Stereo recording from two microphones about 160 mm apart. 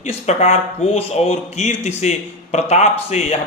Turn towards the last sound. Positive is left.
turn(degrees=40)  # may be behind; listen again after turning